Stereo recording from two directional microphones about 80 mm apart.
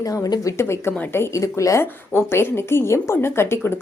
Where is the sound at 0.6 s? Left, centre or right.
Left.